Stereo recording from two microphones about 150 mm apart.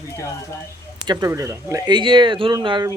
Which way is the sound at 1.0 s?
25° right (ahead or behind).